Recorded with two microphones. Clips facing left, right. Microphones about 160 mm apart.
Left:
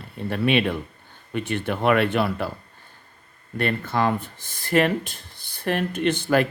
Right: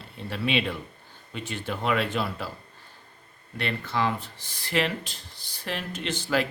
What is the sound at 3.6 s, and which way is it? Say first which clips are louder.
Speech: left 5 dB; 50° left (ahead or behind).